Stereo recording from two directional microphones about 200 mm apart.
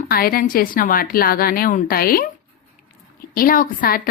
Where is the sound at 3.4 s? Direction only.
45° left (ahead or behind).